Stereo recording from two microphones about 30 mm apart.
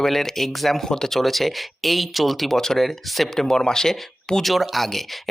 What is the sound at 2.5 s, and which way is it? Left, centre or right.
Speech, centre.